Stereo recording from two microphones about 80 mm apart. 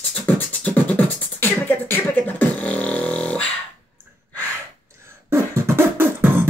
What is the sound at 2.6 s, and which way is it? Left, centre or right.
Dog, centre.